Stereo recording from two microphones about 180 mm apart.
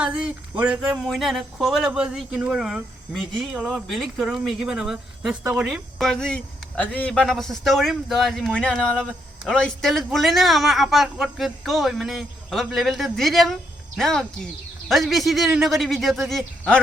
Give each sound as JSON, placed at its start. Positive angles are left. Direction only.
{"t": 0.0, "sound": "a man's voice", "side_deg": -5}